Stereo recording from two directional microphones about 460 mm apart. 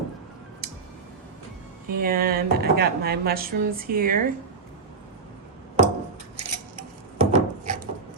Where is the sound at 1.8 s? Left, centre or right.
Centre.